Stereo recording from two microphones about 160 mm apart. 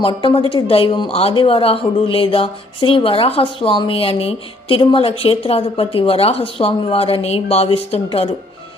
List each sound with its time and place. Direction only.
0.0 s a woman's voice: 30° left (ahead or behind)